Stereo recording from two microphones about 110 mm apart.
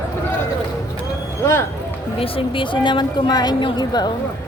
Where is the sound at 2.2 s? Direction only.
55° left (ahead or behind); by 4.1 s 40° left (ahead or behind).